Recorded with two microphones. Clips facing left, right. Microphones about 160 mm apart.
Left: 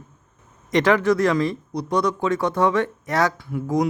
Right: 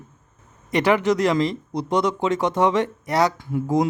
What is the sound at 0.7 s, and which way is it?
Speech, 15° right (ahead or behind).